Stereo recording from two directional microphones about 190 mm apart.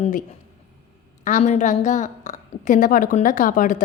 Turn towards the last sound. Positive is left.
turn(degrees=45)  # may be behind; listen again after turning